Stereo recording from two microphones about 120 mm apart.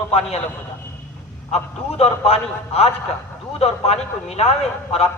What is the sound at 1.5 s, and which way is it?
A man's voice, 55° left (ahead or behind).